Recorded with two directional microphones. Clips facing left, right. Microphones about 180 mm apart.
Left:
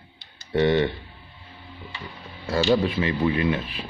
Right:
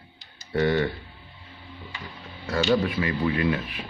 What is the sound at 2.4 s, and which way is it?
Speech, 25° left (ahead or behind).